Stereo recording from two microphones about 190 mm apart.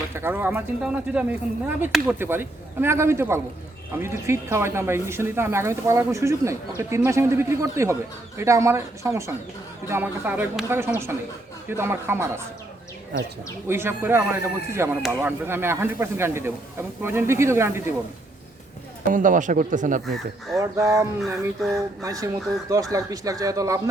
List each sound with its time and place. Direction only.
0.1 s speech: 10° right (ahead or behind)
13.7 s speech: 10° right (ahead or behind)
19.1 s speech: 45° right (ahead or behind)
20.6 s speech: 15° right (ahead or behind)
21.2 s a sound: centre (ahead or behind)
22.0 s speech: 15° right (ahead or behind)